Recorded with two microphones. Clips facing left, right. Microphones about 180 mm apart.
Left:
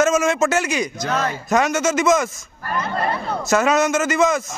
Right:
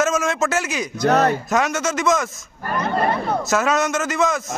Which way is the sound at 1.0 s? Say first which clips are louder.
Right 11 dB; 65° right (ahead or behind).